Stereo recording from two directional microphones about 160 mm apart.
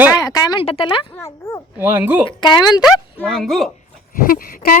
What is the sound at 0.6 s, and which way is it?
Speech, 35° left (ahead or behind).